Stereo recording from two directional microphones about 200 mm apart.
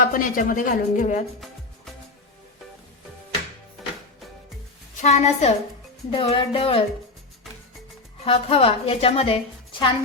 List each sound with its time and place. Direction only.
0.0 s a woman's voice: 45° left (ahead or behind)
3.8 s music: centre (ahead or behind)
4.9 s a woman's voice: 35° left (ahead or behind)
8.2 s a woman's voice: 30° left (ahead or behind)